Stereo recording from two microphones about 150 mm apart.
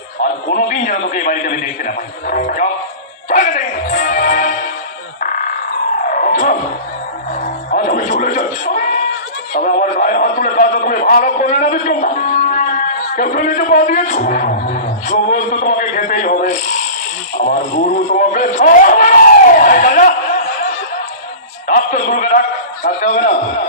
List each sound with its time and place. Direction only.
0.5 s a man's voice: 60° left (ahead or behind)
3.2 s music: 60° left (ahead or behind)
6.0 s a sound: 65° left (ahead or behind)
7.3 s music: 60° left (ahead or behind)
9.6 s a man's voice: 65° left (ahead or behind)
17.9 s a man's voice: 65° left (ahead or behind)
21.7 s a man's voice: 50° left (ahead or behind)